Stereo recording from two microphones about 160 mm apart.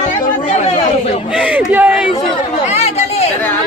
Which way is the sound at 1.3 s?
5° right (ahead or behind).